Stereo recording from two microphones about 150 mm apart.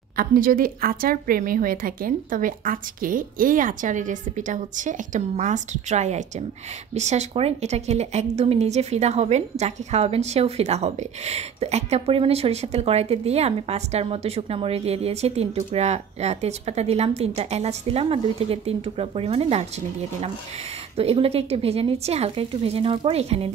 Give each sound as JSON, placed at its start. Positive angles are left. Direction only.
{"t": 0.1, "sound": "a woman's voice", "side_deg": -70}
{"t": 20.9, "sound": "a woman's voice", "side_deg": -40}